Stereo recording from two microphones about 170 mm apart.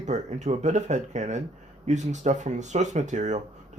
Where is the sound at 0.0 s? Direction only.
45° right (ahead or behind).